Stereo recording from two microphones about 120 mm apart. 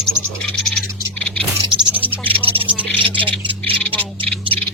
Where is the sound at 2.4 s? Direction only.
50° right (ahead or behind).